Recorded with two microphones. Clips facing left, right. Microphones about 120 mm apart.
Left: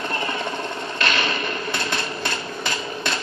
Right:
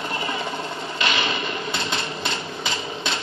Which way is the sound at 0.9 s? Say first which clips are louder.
Even; 15° right (ahead or behind).